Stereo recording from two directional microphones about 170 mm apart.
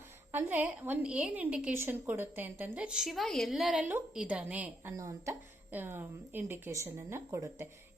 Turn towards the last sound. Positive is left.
turn(degrees=-15)  # may be behind; listen again after turning